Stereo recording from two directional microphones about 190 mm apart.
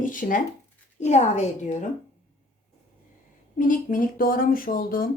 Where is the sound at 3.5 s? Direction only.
45° left (ahead or behind).